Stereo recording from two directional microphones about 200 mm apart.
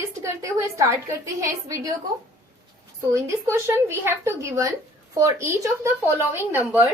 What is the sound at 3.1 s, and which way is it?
A woman's voice, 15° right (ahead or behind).